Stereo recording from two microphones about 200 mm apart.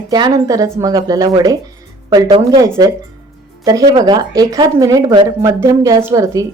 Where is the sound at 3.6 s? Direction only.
20° right (ahead or behind).